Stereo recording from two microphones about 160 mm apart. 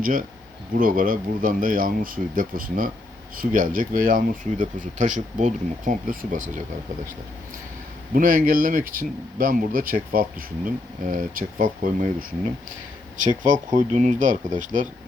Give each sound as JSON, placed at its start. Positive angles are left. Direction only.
{"t": 0.0, "sound": "speech", "side_deg": -60}
{"t": 8.1, "sound": "speech", "side_deg": -55}
{"t": 13.4, "sound": "speech", "side_deg": -50}